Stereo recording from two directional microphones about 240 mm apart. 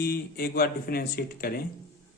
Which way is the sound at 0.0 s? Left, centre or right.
Left.